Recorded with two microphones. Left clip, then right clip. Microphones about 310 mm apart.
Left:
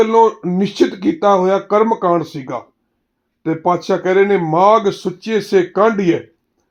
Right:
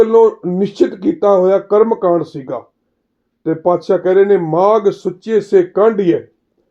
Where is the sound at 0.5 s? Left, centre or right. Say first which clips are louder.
Right 1 dB; left.